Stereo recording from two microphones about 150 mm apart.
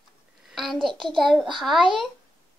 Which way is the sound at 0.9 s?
30° right (ahead or behind).